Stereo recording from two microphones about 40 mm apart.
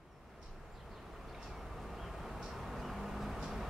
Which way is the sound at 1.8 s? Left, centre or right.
Centre.